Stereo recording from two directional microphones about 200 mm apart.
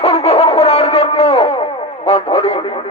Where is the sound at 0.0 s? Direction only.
30° left (ahead or behind).